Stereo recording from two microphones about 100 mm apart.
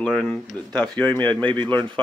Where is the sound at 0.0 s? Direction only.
5° left (ahead or behind).